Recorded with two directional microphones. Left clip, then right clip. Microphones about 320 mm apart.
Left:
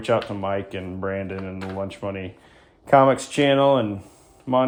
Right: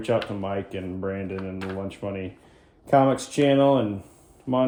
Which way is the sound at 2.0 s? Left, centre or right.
Left.